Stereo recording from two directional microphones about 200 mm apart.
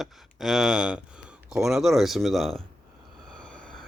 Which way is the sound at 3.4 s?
5° left (ahead or behind).